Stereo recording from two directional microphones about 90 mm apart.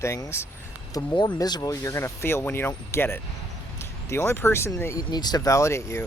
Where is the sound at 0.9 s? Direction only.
45° left (ahead or behind); by 4.7 s 30° left (ahead or behind).